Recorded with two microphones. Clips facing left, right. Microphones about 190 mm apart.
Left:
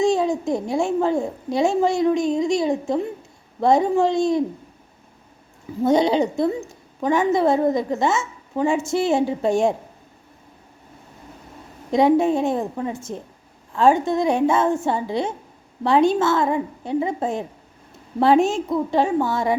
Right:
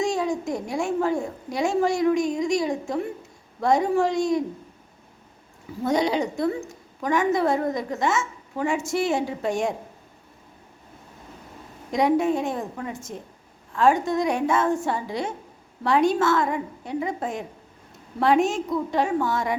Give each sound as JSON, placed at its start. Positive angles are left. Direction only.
{"t": 0.0, "sound": "a child's voice", "side_deg": 25}
{"t": 5.8, "sound": "a child's voice", "side_deg": 25}
{"t": 11.9, "sound": "a child's voice", "side_deg": 30}